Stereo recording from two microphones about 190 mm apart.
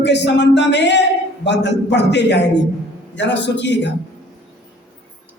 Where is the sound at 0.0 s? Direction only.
65° left (ahead or behind).